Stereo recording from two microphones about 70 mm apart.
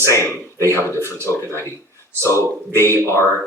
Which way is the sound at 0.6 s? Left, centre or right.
Left.